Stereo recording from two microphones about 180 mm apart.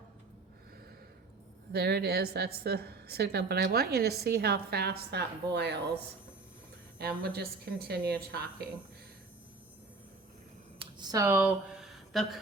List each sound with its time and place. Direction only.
1.7 s a woman's voice: 60° right (ahead or behind)
7.0 s a woman's voice: 60° right (ahead or behind)
10.9 s speech: 20° right (ahead or behind)
12.1 s a sound: centre (ahead or behind)